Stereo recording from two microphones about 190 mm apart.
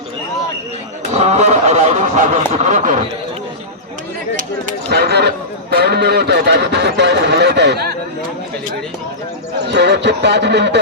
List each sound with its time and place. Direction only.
1.1 s a sound: 35° right (ahead or behind)
4.9 s speech: 60° right (ahead or behind)
9.6 s speech: 65° right (ahead or behind)